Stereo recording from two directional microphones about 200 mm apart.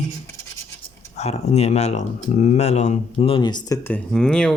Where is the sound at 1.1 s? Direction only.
35° left (ahead or behind).